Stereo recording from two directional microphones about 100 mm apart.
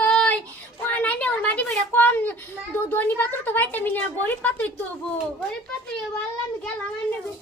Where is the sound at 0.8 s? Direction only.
15° left (ahead or behind).